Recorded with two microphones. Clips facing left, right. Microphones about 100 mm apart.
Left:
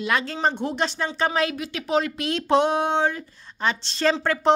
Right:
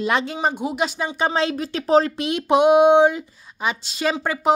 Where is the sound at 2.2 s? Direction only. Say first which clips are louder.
Right 3 dB; 15° right (ahead or behind).